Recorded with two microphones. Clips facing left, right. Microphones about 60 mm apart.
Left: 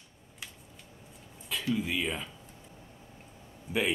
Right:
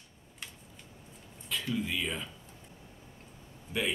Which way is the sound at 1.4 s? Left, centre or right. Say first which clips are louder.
Left 2 dB; centre.